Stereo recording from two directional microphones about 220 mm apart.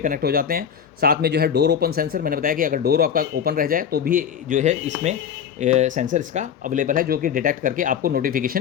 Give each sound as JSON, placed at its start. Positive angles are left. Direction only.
{"t": 0.0, "sound": "speech", "side_deg": -40}